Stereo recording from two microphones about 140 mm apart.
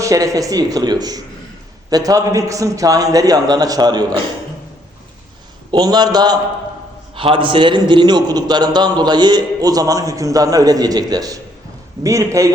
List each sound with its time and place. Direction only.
0.0 s a man's voice: 25° right (ahead or behind)
5.7 s a man's voice: 30° right (ahead or behind)